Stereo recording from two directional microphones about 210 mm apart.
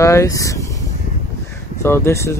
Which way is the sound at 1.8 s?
10° left (ahead or behind).